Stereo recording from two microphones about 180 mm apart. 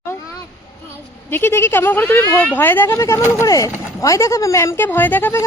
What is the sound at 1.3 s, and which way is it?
Speech, 10° left (ahead or behind).